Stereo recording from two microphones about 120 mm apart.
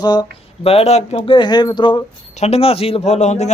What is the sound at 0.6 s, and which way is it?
A man's voice, 55° left (ahead or behind).